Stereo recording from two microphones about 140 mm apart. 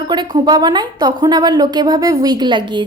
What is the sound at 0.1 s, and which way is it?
A woman's voice, 30° right (ahead or behind).